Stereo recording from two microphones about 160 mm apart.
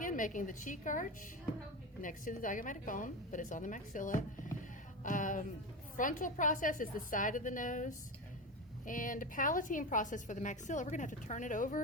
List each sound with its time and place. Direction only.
0.0 s a woman's voice: 55° left (ahead or behind)